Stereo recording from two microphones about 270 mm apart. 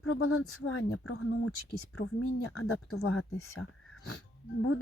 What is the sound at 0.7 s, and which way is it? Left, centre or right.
Speech, left.